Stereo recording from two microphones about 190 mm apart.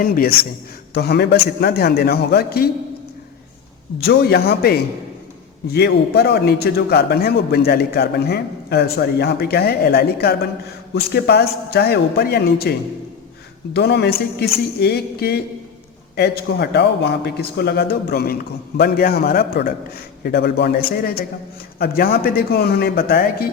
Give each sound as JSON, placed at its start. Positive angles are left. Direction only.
{"t": 0.0, "sound": "a man's voice", "side_deg": 50}
{"t": 4.0, "sound": "a man's voice", "side_deg": 55}
{"t": 13.7, "sound": "a man's voice", "side_deg": 60}